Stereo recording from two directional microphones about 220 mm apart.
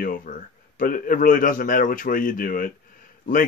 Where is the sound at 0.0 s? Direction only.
35° left (ahead or behind).